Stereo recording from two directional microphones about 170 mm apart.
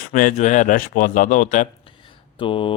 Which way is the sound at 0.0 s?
50° left (ahead or behind).